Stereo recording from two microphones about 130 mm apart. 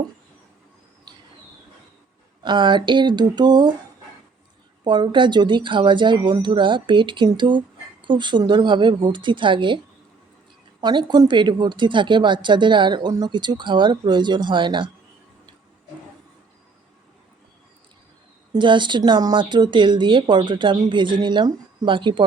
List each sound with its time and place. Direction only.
1.1 s a sound: 35° right (ahead or behind)
2.4 s speech: 35° right (ahead or behind)
4.8 s speech: 35° right (ahead or behind)
18.5 s speech: 35° right (ahead or behind)